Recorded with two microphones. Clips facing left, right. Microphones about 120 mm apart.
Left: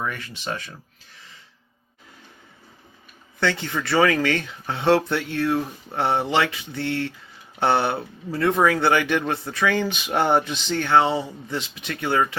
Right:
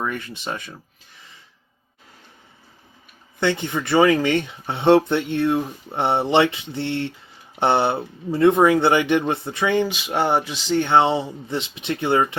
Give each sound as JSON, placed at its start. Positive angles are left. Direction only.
{"t": 0.0, "sound": "speech", "side_deg": -20}
{"t": 3.4, "sound": "speech", "side_deg": -20}
{"t": 9.9, "sound": "speech", "side_deg": -5}
{"t": 10.8, "sound": "speech", "side_deg": -25}